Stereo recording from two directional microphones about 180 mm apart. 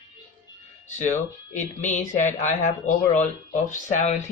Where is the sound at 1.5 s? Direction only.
40° left (ahead or behind).